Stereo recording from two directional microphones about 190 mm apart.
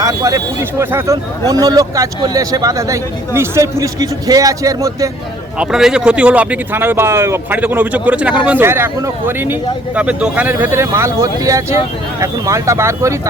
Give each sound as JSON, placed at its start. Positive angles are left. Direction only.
{"t": 0.0, "sound": "speech", "side_deg": -20}
{"t": 5.5, "sound": "speech", "side_deg": -5}